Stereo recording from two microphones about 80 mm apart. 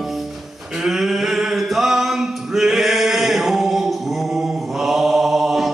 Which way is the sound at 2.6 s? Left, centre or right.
Centre.